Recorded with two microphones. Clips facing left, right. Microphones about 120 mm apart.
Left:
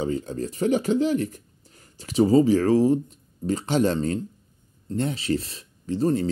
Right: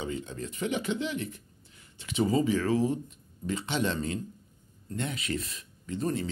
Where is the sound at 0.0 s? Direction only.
40° left (ahead or behind).